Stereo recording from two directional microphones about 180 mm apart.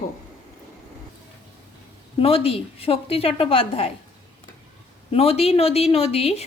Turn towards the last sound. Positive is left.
turn(degrees=35)  # may be behind; listen again after turning